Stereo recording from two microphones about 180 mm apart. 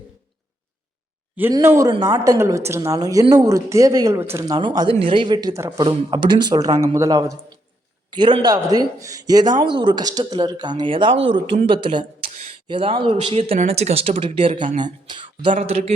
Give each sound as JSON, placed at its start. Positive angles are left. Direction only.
{"t": 1.4, "sound": "a woman's voice", "side_deg": -15}